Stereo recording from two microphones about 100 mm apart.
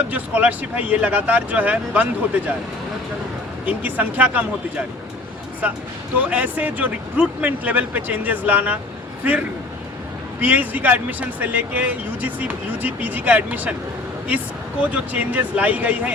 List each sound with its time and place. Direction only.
0.0 s speech: 15° right (ahead or behind)
3.7 s speech: 15° right (ahead or behind)
5.6 s speech: 15° right (ahead or behind)
10.4 s speech: 15° right (ahead or behind)